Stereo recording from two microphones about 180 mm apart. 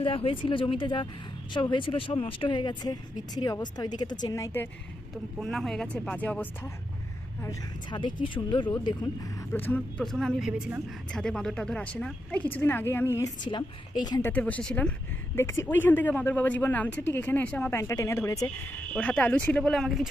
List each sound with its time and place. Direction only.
0.0 s speech: 30° left (ahead or behind)
5.4 s speech: centre (ahead or behind)
7.4 s speech: 25° left (ahead or behind)
9.5 s speech: 10° left (ahead or behind)
14.3 s speech: 5° left (ahead or behind)